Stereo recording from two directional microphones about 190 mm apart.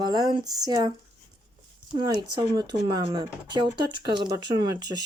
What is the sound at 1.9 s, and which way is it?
Speech, 20° right (ahead or behind).